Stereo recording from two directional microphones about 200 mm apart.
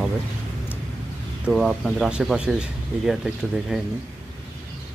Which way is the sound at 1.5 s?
Centre (ahead or behind).